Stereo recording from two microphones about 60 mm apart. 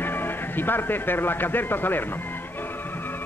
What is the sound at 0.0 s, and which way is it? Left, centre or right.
Speech, left.